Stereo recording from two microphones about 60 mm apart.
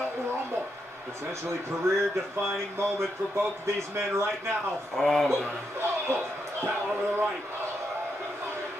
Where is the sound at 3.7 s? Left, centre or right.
Right.